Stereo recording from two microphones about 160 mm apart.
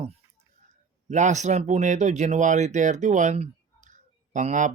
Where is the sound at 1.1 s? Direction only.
50° right (ahead or behind).